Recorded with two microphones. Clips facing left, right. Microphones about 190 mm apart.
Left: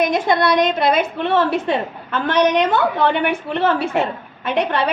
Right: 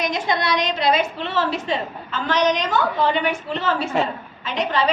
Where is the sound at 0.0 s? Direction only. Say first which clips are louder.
Left 6 dB; 55° left (ahead or behind).